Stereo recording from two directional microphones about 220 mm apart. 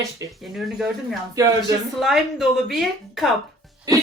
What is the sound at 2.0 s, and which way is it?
Speech, centre (ahead or behind).